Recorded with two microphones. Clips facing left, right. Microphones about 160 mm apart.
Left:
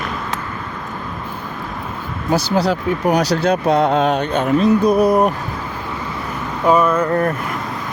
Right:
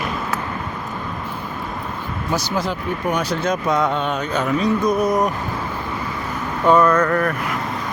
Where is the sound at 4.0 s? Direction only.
80° left.